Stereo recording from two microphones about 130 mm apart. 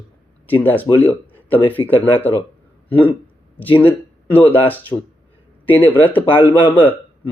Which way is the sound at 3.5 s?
15° left (ahead or behind).